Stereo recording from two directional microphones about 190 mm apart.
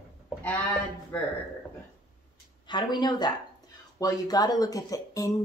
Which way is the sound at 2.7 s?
20° left (ahead or behind).